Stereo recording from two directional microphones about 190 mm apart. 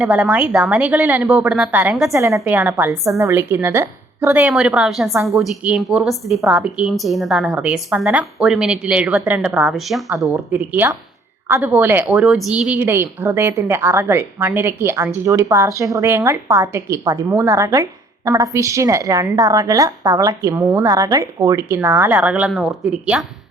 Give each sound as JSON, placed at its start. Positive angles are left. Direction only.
{"t": 0.0, "sound": "a woman's voice", "side_deg": -5}
{"t": 2.1, "sound": "a woman's voice", "side_deg": -15}